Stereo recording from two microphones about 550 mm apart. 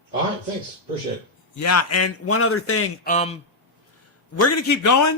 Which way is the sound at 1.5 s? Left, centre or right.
Left.